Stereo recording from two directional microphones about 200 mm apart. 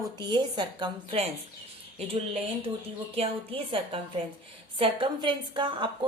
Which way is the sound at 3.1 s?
30° right (ahead or behind).